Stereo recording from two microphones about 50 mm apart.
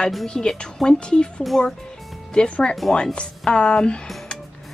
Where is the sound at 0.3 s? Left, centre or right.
Centre.